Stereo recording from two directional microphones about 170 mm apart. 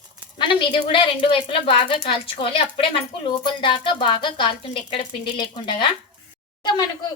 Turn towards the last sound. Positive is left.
turn(degrees=25)  # may be behind; listen again after turning